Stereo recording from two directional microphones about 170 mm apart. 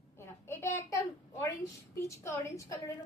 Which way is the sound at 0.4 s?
15° left (ahead or behind).